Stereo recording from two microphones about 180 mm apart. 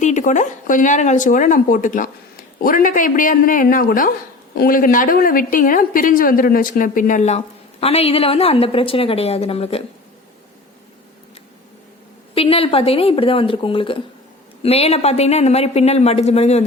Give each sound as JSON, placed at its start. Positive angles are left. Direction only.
{"t": 0.0, "sound": "a woman's voice", "side_deg": 40}
{"t": 12.3, "sound": "speech", "side_deg": 30}